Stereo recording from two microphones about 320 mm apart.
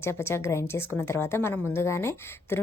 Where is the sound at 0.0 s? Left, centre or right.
Centre.